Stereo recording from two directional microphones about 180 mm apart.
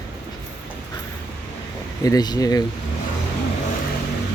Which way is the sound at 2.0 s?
20° left (ahead or behind).